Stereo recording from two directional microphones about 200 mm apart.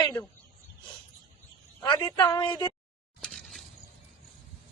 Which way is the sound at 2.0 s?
20° left (ahead or behind).